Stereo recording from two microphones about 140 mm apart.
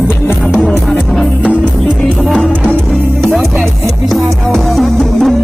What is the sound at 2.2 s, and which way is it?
Music, centre (ahead or behind).